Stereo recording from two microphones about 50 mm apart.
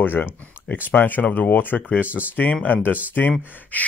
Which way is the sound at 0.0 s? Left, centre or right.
Left.